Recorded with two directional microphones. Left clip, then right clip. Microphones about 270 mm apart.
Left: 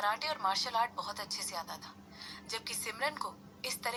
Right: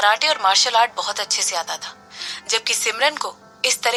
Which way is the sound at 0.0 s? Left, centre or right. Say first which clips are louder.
Right 16 dB; right.